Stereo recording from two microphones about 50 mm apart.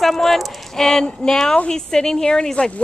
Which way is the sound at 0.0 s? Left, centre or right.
Centre.